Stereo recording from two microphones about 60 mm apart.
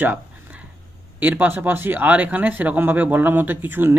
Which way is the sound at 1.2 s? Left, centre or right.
Right.